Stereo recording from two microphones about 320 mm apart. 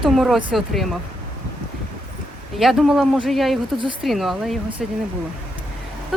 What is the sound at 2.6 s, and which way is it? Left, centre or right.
Speech, centre.